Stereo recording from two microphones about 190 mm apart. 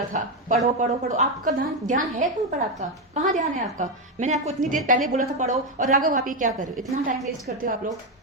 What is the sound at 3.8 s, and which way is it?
A woman's voice, 35° right (ahead or behind).